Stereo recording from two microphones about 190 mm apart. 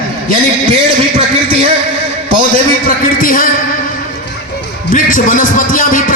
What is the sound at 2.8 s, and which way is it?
Speech, 50° left (ahead or behind).